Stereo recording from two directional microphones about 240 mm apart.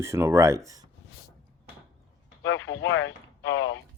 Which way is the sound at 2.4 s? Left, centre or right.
Left.